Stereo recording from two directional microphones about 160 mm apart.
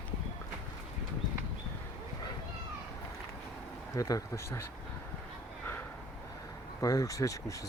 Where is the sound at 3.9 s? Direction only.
20° left (ahead or behind).